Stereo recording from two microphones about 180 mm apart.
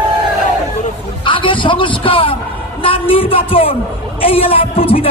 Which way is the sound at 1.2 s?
30° left (ahead or behind).